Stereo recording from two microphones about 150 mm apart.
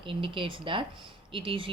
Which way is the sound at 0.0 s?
35° right (ahead or behind).